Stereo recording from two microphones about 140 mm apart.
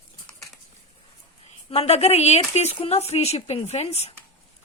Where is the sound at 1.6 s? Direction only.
45° left (ahead or behind).